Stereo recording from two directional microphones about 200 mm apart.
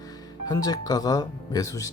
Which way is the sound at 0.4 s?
20° left (ahead or behind).